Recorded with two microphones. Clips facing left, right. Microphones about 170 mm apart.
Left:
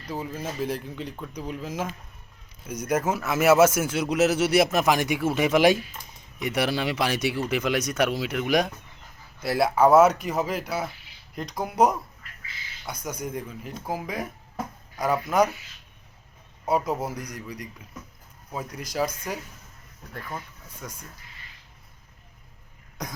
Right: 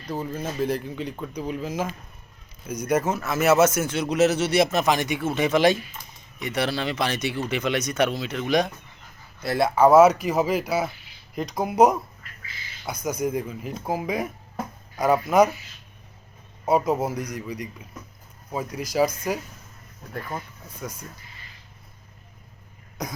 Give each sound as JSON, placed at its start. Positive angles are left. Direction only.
{"t": 0.1, "sound": "speech", "side_deg": 5}
{"t": 16.6, "sound": "speech", "side_deg": -10}
{"t": 20.8, "sound": "speech", "side_deg": -5}